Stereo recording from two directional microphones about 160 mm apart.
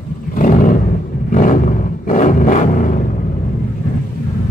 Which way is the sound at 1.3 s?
55° left (ahead or behind).